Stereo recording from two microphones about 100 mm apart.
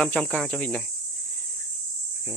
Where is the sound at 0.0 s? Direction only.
10° left (ahead or behind).